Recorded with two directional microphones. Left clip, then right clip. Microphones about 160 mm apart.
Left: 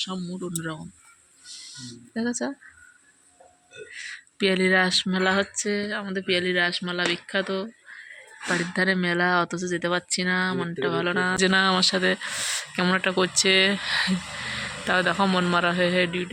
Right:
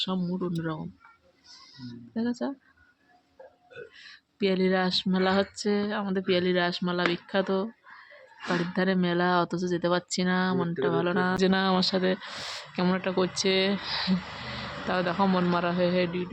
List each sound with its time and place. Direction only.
0.0 s speech: 20° right (ahead or behind)
1.9 s speech: 5° left (ahead or behind)
4.4 s speech: 5° left (ahead or behind); by 7.9 s 20° right (ahead or behind)
8.4 s speech: centre (ahead or behind)